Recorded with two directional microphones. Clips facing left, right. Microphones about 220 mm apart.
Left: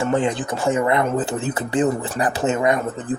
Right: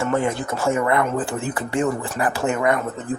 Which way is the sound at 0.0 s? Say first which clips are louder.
Left 1 dB; 15° left (ahead or behind).